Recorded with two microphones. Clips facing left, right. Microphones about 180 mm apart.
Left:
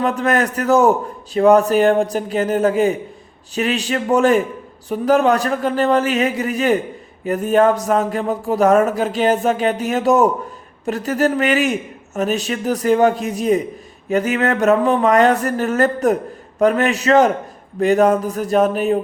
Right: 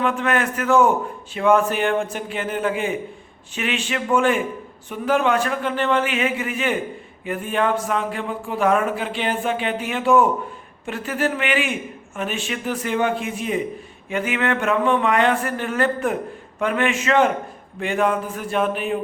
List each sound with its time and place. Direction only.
0.0 s speech: 40° left (ahead or behind)